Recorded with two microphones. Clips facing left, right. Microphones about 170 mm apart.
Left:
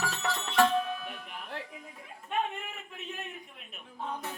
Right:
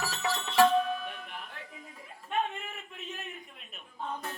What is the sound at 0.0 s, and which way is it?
Music, centre (ahead or behind).